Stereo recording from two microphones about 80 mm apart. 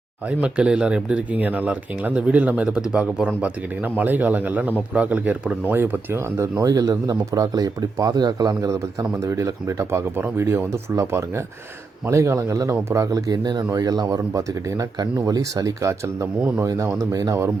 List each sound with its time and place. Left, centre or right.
0.3 s speech: centre; by 13.7 s right
13.7 s speech: right